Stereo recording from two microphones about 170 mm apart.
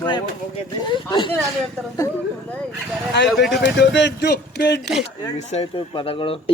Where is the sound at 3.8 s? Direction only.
90° left.